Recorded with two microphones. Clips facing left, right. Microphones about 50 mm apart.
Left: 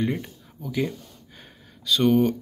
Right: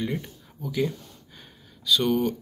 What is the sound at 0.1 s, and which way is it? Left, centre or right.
Speech, left.